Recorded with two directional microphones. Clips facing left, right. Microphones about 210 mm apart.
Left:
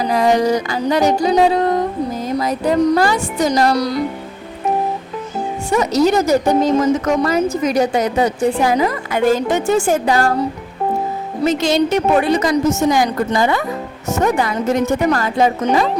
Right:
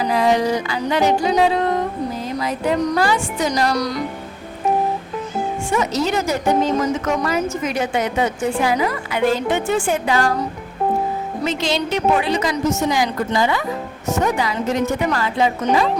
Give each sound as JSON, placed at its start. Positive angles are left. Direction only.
{"t": 0.1, "sound": "speech", "side_deg": 45}
{"t": 5.7, "sound": "speech", "side_deg": 40}
{"t": 11.4, "sound": "a woman's voice", "side_deg": 45}